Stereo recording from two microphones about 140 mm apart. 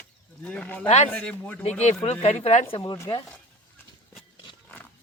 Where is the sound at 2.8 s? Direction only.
25° left (ahead or behind).